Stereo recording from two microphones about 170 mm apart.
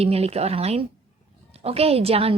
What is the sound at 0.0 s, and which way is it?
A woman's voice, 35° right (ahead or behind).